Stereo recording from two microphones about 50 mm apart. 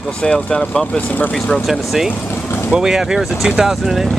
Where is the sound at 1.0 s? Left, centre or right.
Left.